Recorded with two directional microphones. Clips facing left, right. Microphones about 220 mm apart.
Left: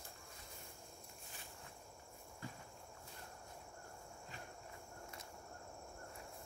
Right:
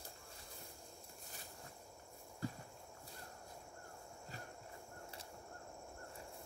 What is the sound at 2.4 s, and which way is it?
Walk, 40° right (ahead or behind).